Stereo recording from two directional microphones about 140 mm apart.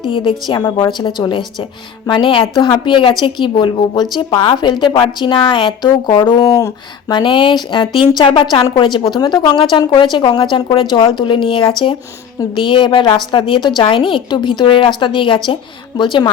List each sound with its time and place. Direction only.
0.1 s speech: 35° left (ahead or behind)
2.0 s speech: 35° left (ahead or behind)
7.2 s speech: 35° left (ahead or behind)